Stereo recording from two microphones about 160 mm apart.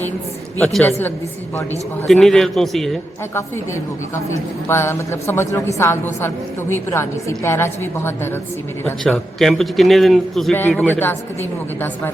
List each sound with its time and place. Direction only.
0.6 s a man's voice: centre (ahead or behind)
2.0 s a man's voice: centre (ahead or behind)
4.7 s a woman's voice: 15° left (ahead or behind)
9.0 s a man's voice: centre (ahead or behind)
10.8 s a woman's voice: 10° left (ahead or behind)